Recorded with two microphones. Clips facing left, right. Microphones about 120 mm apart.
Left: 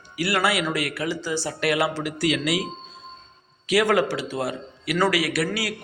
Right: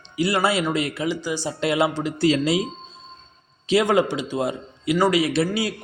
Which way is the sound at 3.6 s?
25° right (ahead or behind).